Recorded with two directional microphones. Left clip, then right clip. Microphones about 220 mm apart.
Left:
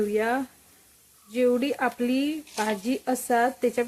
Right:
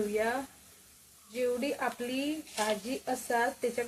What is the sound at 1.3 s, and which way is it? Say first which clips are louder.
Speech: left 8 dB; 50° left (ahead or behind).